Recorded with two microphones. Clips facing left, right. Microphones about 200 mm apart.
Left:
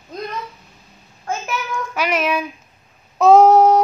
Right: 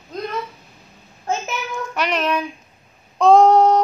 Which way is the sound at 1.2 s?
25° right (ahead or behind).